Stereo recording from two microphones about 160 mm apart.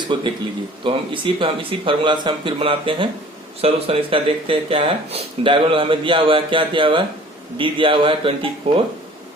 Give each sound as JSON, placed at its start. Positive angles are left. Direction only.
{"t": 0.0, "sound": "speech", "side_deg": -30}